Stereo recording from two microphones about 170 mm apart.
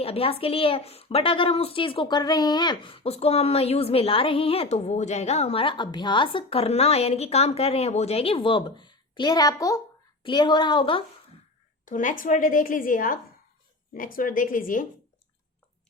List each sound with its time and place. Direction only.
0.0 s a woman's voice: 35° left (ahead or behind)
11.9 s a woman's voice: 50° left (ahead or behind)